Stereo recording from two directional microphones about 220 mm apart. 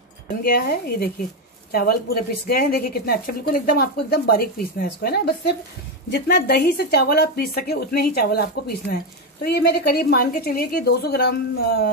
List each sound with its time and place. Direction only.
0.4 s speech: 45° left (ahead or behind)